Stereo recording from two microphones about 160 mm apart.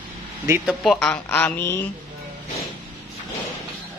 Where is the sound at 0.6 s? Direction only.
Centre (ahead or behind).